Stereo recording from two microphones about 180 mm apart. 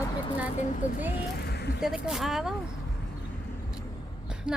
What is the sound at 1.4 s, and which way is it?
Vehicle, 65° left (ahead or behind).